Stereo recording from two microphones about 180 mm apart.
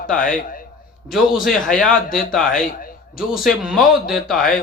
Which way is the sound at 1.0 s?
Centre (ahead or behind).